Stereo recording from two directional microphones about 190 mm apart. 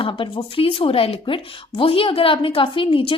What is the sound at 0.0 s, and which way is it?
A woman's voice, 25° left (ahead or behind).